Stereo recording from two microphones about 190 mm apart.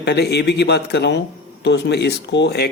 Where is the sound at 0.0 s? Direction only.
60° left (ahead or behind).